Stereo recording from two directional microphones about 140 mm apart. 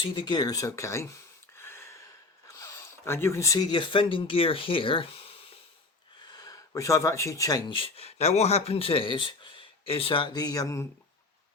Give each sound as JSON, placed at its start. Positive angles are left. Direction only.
{"t": 0.0, "sound": "speech", "side_deg": 35}
{"t": 1.5, "sound": "a sound", "side_deg": 15}
{"t": 2.5, "sound": "speech", "side_deg": 20}
{"t": 6.2, "sound": "speech", "side_deg": 30}
{"t": 7.7, "sound": "speech", "side_deg": 45}